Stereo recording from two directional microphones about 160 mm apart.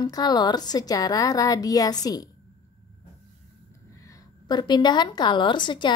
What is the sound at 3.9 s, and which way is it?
A woman's voice, 20° left (ahead or behind).